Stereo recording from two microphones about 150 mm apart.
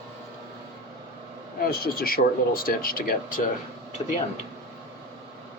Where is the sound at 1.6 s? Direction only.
80° left.